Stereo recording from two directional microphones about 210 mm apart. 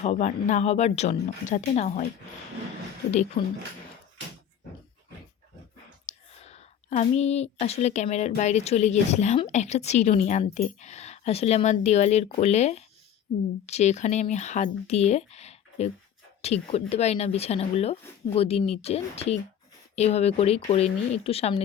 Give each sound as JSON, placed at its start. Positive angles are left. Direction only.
{"t": 0.0, "sound": "speech", "side_deg": 35}
{"t": 6.1, "sound": "speech", "side_deg": 30}